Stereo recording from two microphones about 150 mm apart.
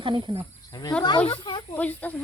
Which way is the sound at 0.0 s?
35° right (ahead or behind).